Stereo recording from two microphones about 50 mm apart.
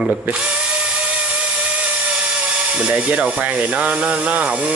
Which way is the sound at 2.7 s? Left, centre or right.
Right.